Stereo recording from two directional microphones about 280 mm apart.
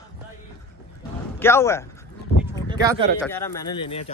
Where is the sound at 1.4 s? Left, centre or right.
Centre.